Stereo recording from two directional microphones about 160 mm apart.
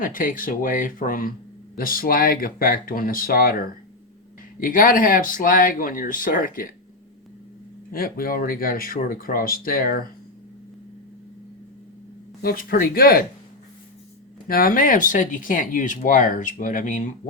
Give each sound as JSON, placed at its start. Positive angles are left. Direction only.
{"t": 0.0, "sound": "speech", "side_deg": 60}
{"t": 4.6, "sound": "speech", "side_deg": 60}
{"t": 7.9, "sound": "speech", "side_deg": 65}
{"t": 12.4, "sound": "speech", "side_deg": 70}
{"t": 14.4, "sound": "speech", "side_deg": 65}